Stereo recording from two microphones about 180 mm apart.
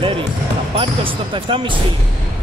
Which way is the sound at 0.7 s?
30° right (ahead or behind).